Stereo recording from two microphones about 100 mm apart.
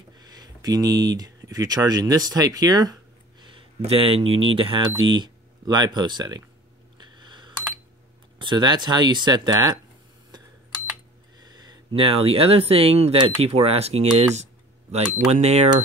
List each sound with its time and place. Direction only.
0.1 s speech: 45° right (ahead or behind)
3.4 s speech: 65° right (ahead or behind); by 6.4 s 40° right (ahead or behind)
7.2 s a sound: 50° right (ahead or behind)
8.4 s speech: 50° right (ahead or behind)
11.3 s a sound: 45° right (ahead or behind)
11.9 s speech: 70° right (ahead or behind); by 15.7 s 90° right